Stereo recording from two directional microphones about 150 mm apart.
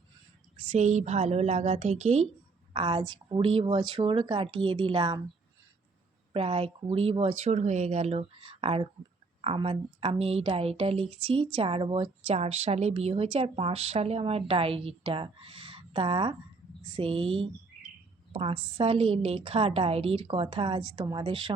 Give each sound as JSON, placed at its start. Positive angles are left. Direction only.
{"t": 0.7, "sound": "a woman's voice", "side_deg": -50}
{"t": 2.7, "sound": "a woman's voice", "side_deg": -35}
{"t": 6.3, "sound": "speech", "side_deg": -40}